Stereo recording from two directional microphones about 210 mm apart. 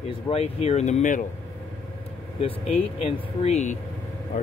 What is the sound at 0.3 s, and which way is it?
Speech, 30° left (ahead or behind).